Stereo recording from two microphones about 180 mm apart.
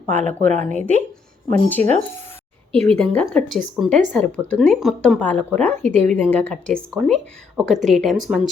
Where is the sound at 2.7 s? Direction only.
5° left (ahead or behind).